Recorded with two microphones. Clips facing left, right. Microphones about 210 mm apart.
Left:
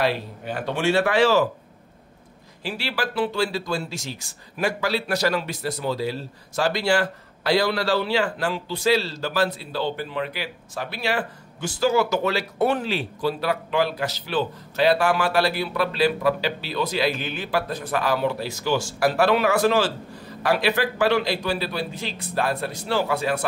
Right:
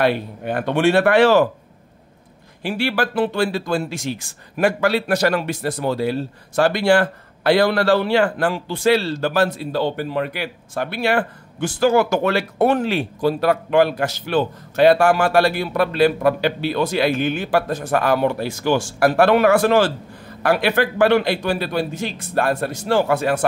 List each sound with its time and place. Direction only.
0.0 s speech: 55° right (ahead or behind)
2.6 s speech: 50° right (ahead or behind)